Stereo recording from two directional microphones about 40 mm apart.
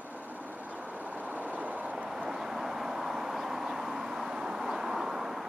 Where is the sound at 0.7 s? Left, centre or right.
Right.